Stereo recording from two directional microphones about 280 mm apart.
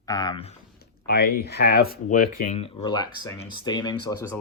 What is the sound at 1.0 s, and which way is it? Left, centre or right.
Speech, left.